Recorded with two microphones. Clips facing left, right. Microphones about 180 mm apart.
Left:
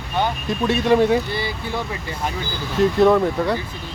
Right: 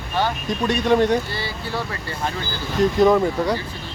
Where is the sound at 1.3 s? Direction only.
15° left (ahead or behind).